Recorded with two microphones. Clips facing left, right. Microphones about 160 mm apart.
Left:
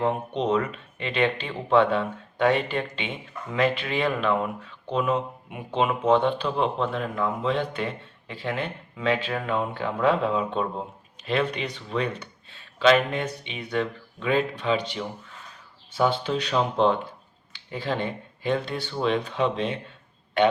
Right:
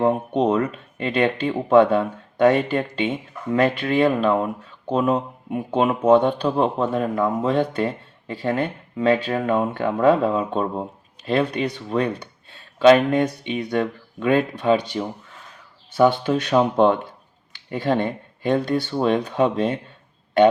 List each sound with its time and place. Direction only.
0.0 s speech: 40° right (ahead or behind)